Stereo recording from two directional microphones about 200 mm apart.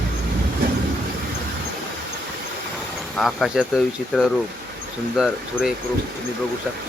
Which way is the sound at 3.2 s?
Centre (ahead or behind).